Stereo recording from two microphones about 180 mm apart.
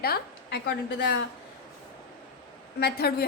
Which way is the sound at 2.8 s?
60° left (ahead or behind).